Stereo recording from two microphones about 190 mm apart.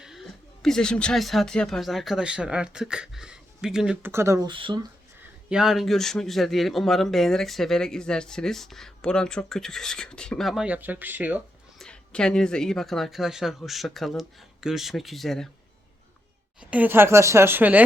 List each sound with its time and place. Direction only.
0.0 s speech: centre (ahead or behind)
4.1 s speech: 15° right (ahead or behind)
4.5 s speech: 25° right (ahead or behind)
5.5 s speech: centre (ahead or behind)
11.8 s speech: 5° left (ahead or behind)
16.6 s speech: 5° right (ahead or behind)